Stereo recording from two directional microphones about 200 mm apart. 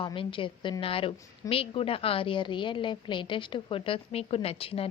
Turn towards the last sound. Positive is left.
turn(degrees=30)  # may be behind; listen again after turning